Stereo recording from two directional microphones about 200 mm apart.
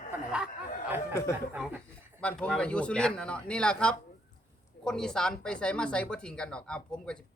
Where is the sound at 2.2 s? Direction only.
5° left (ahead or behind).